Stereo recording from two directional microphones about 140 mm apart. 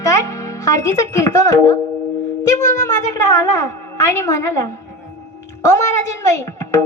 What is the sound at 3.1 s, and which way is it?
A woman's voice, 25° left (ahead or behind).